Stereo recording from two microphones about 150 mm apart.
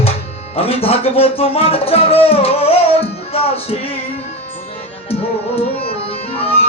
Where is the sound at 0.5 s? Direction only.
40° left (ahead or behind).